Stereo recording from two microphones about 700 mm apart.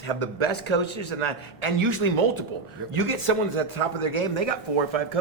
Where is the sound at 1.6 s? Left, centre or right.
Right.